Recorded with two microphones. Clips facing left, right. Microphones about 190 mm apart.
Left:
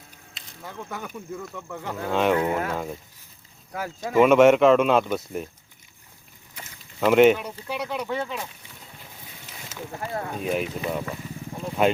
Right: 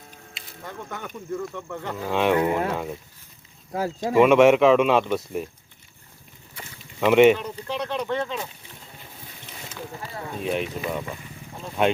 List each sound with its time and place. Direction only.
0.3 s speech: 5° left (ahead or behind)
2.3 s speech: 10° right (ahead or behind)
3.7 s speech: 30° right (ahead or behind)
4.2 s speech: centre (ahead or behind)
7.0 s speech: centre (ahead or behind)
10.4 s speech: centre (ahead or behind)